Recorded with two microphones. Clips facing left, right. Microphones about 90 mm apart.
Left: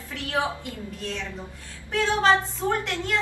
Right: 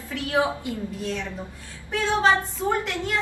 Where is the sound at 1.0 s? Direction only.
10° right (ahead or behind).